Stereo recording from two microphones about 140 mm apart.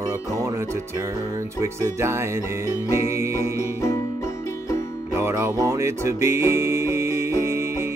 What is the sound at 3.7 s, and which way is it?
Music, 20° left (ahead or behind).